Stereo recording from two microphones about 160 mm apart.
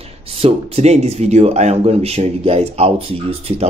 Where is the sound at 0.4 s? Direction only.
40° right (ahead or behind).